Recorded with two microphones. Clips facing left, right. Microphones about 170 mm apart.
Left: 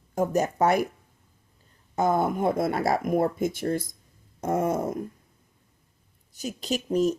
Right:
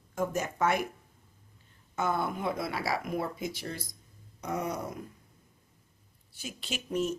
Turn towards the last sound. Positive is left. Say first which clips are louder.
# left 8 dB
turn(degrees=35)  # may be behind; listen again after turning